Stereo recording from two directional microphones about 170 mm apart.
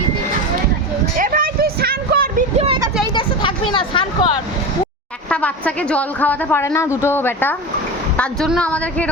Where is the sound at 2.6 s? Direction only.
35° right (ahead or behind).